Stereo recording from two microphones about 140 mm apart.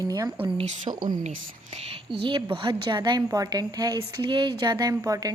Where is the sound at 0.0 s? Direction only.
25° right (ahead or behind).